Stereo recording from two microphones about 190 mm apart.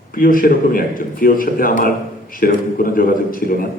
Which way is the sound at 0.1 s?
50° left (ahead or behind).